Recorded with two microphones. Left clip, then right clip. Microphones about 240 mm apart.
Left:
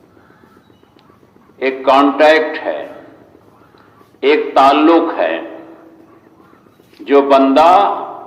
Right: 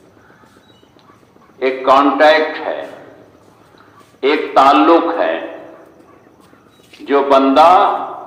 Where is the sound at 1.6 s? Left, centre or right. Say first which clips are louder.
Even; left.